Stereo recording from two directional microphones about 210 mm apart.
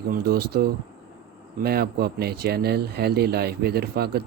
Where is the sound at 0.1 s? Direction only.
45° right (ahead or behind).